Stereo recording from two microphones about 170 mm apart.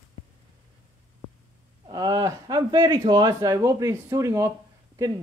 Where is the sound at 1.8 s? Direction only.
25° right (ahead or behind).